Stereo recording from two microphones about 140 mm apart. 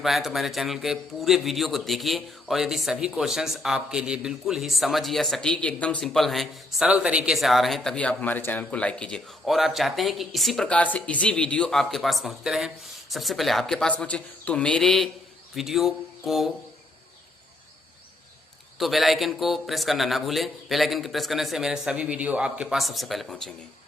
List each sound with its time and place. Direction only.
0.0 s a man's voice: centre (ahead or behind)
18.8 s a man's voice: centre (ahead or behind)